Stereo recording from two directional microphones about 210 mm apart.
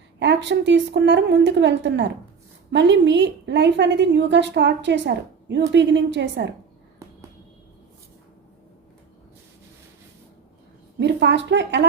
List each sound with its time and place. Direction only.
0.2 s a woman's voice: 55° right (ahead or behind)
11.0 s a woman's voice: 55° right (ahead or behind)